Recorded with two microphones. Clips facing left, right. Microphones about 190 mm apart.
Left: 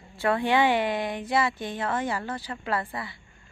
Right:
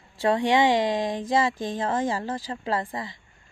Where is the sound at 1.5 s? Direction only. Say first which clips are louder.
Right 4 dB; 90° right.